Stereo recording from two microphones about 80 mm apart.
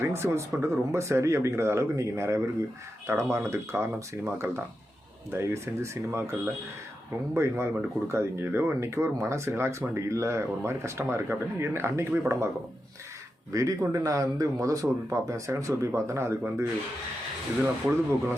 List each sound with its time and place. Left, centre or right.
0.0 s speech: right
7.3 s speech: right
13.5 s speech: right
17.6 s speech: right